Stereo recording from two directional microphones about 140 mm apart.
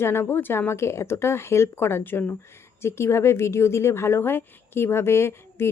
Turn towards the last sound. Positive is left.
turn(degrees=15)  # may be behind; listen again after turning